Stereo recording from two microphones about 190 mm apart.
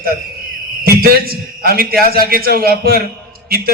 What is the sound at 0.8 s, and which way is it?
A man's voice, 55° right (ahead or behind).